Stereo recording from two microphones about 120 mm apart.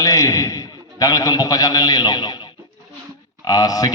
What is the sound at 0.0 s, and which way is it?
A man's voice, 30° left (ahead or behind).